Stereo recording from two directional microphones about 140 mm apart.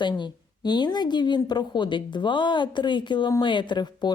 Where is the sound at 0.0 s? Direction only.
35° left (ahead or behind).